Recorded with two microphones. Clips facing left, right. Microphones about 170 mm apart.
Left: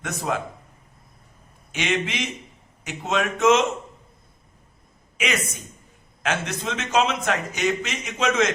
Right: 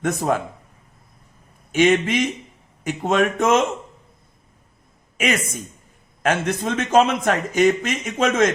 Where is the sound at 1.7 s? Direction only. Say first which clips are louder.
Right 9 dB; 45° right (ahead or behind).